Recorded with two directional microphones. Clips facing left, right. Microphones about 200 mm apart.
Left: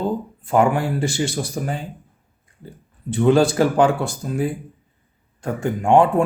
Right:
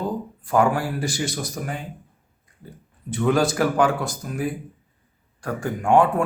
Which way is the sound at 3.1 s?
30° left (ahead or behind).